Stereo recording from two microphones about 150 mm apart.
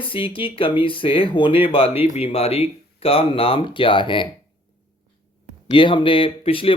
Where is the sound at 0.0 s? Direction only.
35° left (ahead or behind).